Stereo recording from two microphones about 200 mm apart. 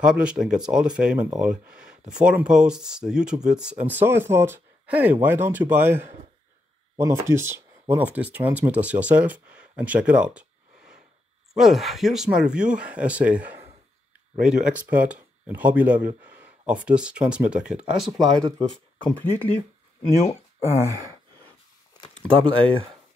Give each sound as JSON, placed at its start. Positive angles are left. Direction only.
{"t": 0.0, "sound": "speech", "side_deg": -5}
{"t": 11.5, "sound": "speech", "side_deg": 0}
{"t": 20.6, "sound": "speech", "side_deg": -15}
{"t": 22.3, "sound": "speech", "side_deg": -25}